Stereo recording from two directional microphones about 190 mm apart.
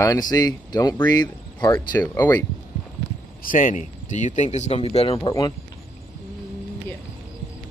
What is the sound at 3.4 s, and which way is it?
Speech, 45° left (ahead or behind).